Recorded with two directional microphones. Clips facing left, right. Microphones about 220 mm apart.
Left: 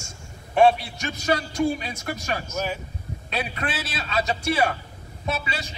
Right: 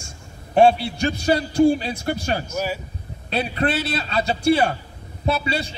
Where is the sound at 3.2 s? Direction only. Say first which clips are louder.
Right 7 dB; 30° right (ahead or behind).